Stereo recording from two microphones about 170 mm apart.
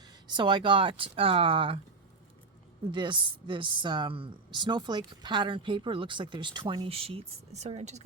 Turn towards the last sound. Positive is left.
turn(degrees=-40)  # may be behind; listen again after turning